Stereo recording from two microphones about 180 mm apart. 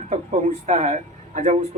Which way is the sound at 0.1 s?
40° right (ahead or behind).